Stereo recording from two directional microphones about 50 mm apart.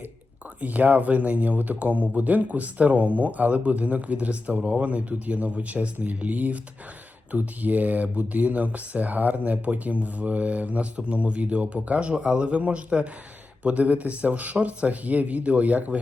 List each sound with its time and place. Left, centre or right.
0.6 s speech: right